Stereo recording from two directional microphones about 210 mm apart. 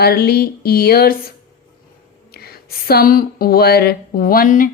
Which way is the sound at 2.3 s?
45° left (ahead or behind).